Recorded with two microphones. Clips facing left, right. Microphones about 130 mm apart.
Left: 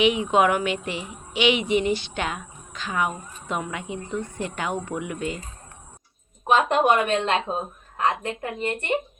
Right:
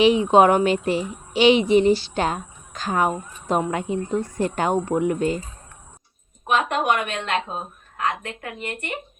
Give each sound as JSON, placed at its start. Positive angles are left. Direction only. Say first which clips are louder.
{"t": 0.0, "sound": "a child's voice", "louder": "right 5 dB", "side_deg": -35}
{"t": 6.5, "sound": "speech", "louder": "left 2 dB", "side_deg": 30}